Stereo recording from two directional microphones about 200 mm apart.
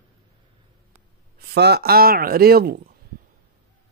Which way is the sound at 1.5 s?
55° right (ahead or behind).